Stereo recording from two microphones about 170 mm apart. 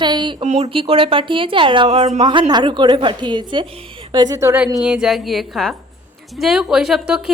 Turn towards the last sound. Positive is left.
turn(degrees=-5)  # may be behind; listen again after turning